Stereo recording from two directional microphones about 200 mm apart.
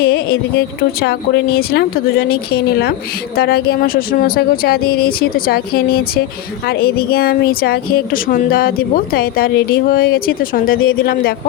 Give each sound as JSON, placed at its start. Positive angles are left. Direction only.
{"t": 0.0, "sound": "a woman's voice", "side_deg": 50}